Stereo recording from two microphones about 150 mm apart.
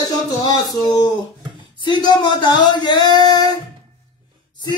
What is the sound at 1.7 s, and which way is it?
Speech, 30° left (ahead or behind).